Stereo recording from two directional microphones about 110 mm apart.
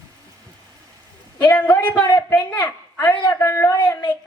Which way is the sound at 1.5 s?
15° left (ahead or behind).